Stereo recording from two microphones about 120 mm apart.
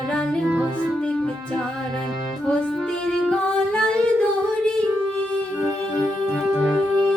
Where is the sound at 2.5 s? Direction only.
5° left (ahead or behind).